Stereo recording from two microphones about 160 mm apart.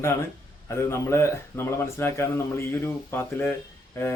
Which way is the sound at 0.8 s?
15° left (ahead or behind).